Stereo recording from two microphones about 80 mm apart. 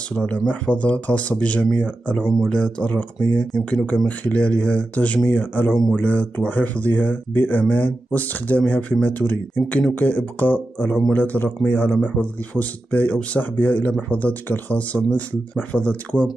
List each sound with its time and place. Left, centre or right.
0.1 s speech: centre